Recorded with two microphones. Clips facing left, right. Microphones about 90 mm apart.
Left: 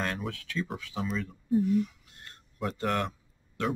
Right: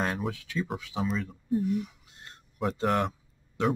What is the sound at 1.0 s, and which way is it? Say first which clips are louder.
Speech: right 2 dB; centre (ahead or behind).